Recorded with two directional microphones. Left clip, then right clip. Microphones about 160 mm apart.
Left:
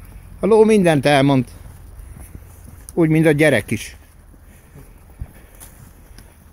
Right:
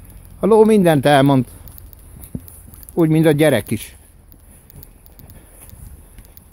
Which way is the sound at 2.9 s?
30° right (ahead or behind).